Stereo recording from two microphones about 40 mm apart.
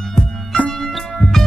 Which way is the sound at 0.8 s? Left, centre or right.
Centre.